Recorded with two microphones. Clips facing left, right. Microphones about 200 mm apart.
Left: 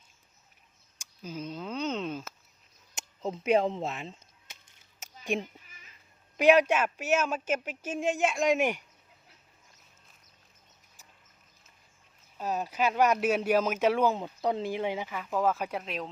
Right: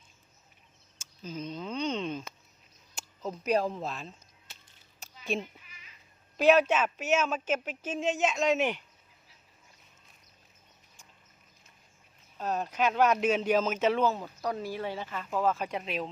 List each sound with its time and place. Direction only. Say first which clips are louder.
0.9 s a sound: even; 10° left (ahead or behind)
2.9 s speech: left 3 dB; 25° left (ahead or behind)
5.2 s speech: left 1 dB; 15° left (ahead or behind)
12.4 s speech: even; 10° left (ahead or behind)